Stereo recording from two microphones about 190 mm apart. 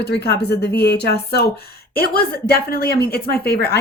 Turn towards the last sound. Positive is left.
turn(degrees=55)  # may be behind; listen again after turning